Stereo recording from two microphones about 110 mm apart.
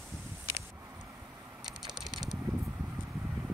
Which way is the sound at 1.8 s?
Centre (ahead or behind).